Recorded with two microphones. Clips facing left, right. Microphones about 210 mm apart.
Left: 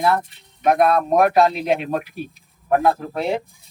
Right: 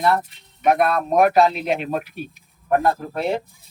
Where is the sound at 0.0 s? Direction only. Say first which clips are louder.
Even; centre (ahead or behind).